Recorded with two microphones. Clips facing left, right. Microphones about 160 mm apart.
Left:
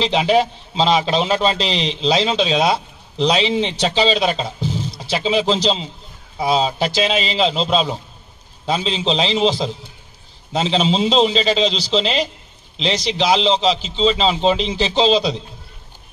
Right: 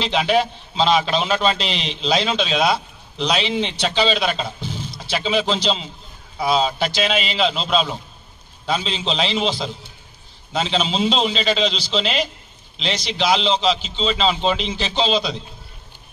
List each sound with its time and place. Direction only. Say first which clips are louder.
0.0 s a man's voice: left 3 dB; 30° left (ahead or behind)